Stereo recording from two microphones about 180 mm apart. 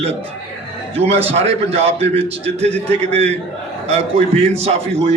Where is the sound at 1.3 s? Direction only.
35° right (ahead or behind).